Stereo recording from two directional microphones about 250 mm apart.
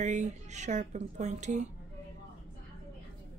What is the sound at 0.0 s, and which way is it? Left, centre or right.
A woman's voice, right.